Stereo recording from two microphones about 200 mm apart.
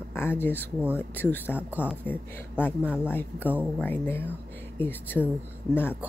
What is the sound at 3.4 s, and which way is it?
Speech, 10° right (ahead or behind).